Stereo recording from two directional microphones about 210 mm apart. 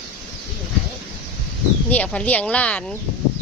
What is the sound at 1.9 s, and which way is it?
Speech, 5° left (ahead or behind).